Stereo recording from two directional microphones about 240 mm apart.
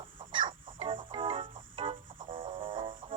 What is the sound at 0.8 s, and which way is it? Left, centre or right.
Music, right.